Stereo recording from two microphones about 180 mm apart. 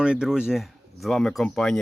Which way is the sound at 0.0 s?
5° right (ahead or behind).